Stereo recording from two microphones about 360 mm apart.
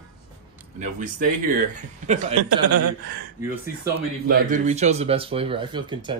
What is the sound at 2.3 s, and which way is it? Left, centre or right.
Speech, right.